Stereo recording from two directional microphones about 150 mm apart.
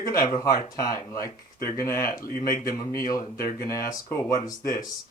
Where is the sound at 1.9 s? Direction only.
75° left (ahead or behind).